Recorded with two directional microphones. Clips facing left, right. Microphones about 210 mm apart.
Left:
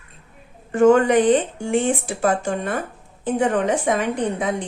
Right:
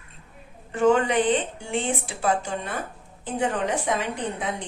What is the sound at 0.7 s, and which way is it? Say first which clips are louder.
Speech: left 6 dB; 45° left (ahead or behind).